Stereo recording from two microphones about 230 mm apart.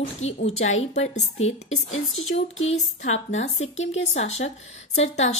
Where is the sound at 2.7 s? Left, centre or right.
Left.